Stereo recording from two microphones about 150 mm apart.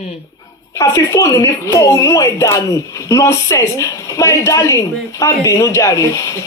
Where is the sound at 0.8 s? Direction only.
20° left (ahead or behind).